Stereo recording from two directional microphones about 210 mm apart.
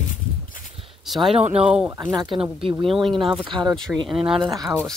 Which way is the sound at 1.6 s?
5° right (ahead or behind).